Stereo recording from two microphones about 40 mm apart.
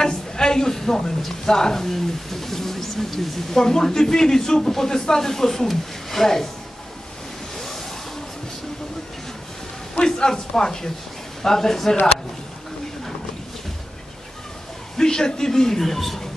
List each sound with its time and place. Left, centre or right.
0.0 s a woman's voice: centre
7.5 s waves: centre
9.9 s a man's voice: centre
15.0 s a man's voice: centre